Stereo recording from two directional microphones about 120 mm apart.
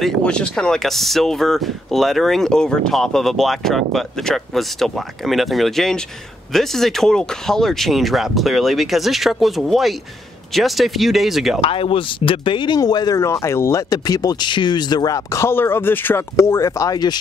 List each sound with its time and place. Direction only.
0.0 s speech: 10° left (ahead or behind)
11.6 s speech: 50° left (ahead or behind); by 17.2 s 35° left (ahead or behind)